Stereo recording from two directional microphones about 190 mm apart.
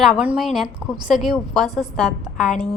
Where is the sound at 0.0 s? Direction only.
5° right (ahead or behind).